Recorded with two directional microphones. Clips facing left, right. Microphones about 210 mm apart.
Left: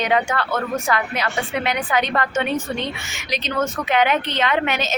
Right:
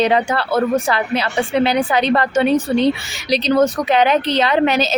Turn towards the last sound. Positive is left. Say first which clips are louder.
# right 6 dB
turn(degrees=-35)  # may be behind; listen again after turning